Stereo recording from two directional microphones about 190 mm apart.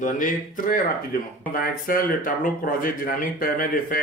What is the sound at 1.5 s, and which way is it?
Speech, 45° left (ahead or behind).